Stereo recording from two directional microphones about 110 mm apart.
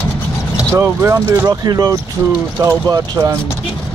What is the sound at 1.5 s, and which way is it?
Speech, 35° right (ahead or behind).